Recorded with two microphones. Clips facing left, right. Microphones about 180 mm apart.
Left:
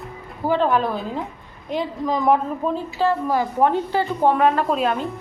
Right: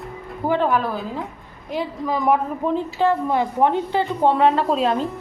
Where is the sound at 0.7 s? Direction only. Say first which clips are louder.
Left 1 dB; 5° right (ahead or behind); by 5.0 s 30° right (ahead or behind).